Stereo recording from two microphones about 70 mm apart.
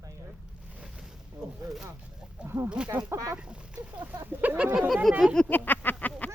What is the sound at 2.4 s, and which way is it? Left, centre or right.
Speech, right.